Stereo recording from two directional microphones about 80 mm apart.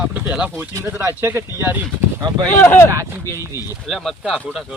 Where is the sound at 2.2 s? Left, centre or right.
Right.